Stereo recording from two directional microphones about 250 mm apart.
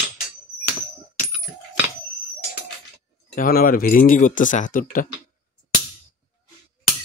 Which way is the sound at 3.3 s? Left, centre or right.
Left.